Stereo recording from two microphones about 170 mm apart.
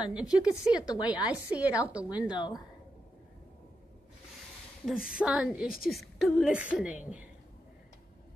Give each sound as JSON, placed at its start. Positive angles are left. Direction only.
{"t": 0.1, "sound": "a woman's voice", "side_deg": -5}
{"t": 2.1, "sound": "speech", "side_deg": 25}
{"t": 4.8, "sound": "a woman's voice", "side_deg": -5}